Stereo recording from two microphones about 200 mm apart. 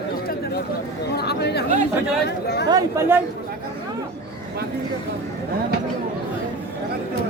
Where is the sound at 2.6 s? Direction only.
15° right (ahead or behind).